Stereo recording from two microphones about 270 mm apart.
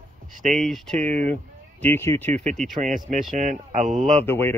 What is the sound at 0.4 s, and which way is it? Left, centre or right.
Speech, right.